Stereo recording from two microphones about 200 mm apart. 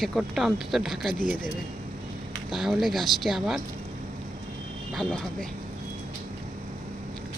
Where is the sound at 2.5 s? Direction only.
Centre (ahead or behind).